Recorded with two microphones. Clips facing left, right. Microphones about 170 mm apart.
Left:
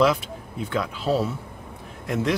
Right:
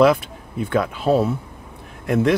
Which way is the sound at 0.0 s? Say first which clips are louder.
Right 5 dB; 55° right (ahead or behind).